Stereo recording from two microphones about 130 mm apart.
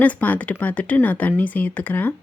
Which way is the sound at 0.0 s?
15° left (ahead or behind).